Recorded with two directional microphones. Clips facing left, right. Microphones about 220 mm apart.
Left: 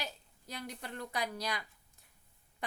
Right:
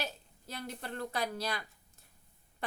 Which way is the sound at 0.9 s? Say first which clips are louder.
Right 3 dB; 15° left (ahead or behind).